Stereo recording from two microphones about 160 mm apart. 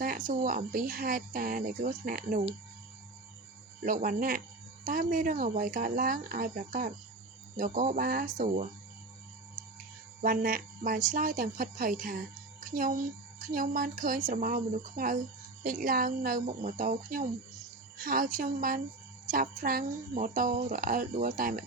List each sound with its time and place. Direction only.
0.0 s speech: 60° right (ahead or behind)
3.8 s speech: 60° right (ahead or behind)
10.2 s speech: 60° right (ahead or behind)